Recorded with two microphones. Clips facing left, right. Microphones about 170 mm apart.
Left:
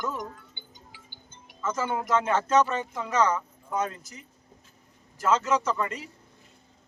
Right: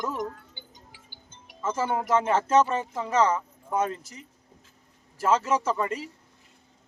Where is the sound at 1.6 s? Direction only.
30° right (ahead or behind).